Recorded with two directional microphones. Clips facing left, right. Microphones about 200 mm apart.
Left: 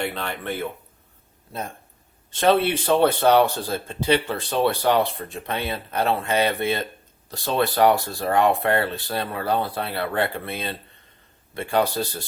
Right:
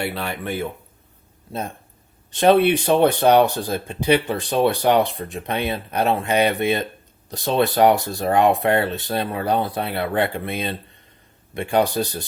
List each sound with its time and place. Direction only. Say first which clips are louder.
0.0 s speech: right 2 dB; 10° right (ahead or behind)
2.3 s speech: right 4 dB; 15° right (ahead or behind)